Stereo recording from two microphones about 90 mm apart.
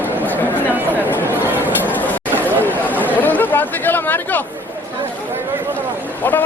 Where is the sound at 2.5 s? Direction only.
20° right (ahead or behind).